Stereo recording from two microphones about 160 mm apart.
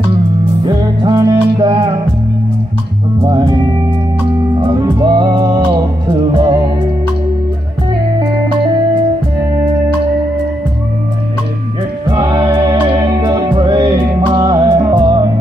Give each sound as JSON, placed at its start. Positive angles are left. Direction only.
{"t": 0.7, "sound": "music", "side_deg": -25}
{"t": 3.2, "sound": "music", "side_deg": -30}
{"t": 4.6, "sound": "music", "side_deg": -25}
{"t": 12.1, "sound": "music", "side_deg": -30}